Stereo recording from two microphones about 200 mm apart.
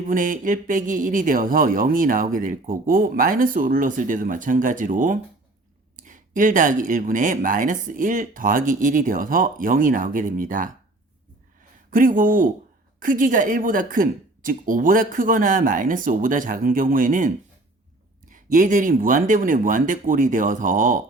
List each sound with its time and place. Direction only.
0.1 s speech: 40° right (ahead or behind)
11.9 s speech: 45° right (ahead or behind)